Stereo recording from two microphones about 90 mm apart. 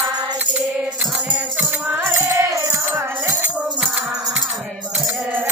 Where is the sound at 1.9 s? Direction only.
30° right (ahead or behind).